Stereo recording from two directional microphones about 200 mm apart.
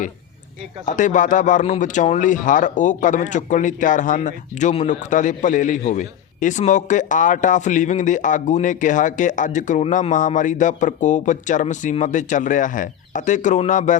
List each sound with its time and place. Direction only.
0.9 s speech: 40° left (ahead or behind)